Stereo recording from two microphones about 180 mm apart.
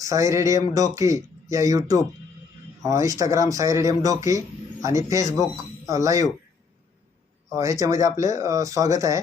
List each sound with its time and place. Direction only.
0.0 s speech: 20° right (ahead or behind)
7.5 s speech: 20° right (ahead or behind)